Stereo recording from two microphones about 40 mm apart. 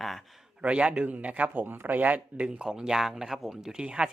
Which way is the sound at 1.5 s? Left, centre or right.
Right.